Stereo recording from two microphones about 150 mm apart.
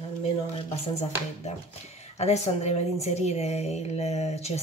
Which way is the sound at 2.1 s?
45° left (ahead or behind).